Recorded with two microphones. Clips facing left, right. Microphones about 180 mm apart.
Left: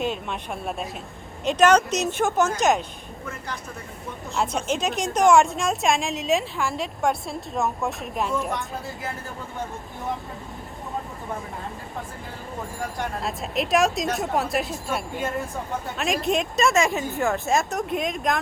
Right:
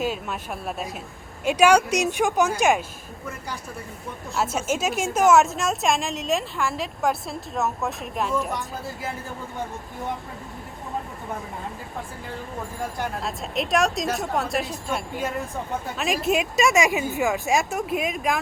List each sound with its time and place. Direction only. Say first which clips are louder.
0.0 s a woman's voice: even; 5° right (ahead or behind)
4.4 s a woman's voice: even; 5° right (ahead or behind)
13.0 s a woman's voice: left 1 dB; centre (ahead or behind)
16.7 s a woman's voice: right 1 dB; 15° right (ahead or behind)
17.2 s a woman's voice: left 1 dB; centre (ahead or behind)